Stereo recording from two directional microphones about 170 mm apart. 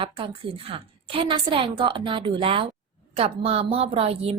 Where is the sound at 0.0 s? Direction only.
35° right (ahead or behind).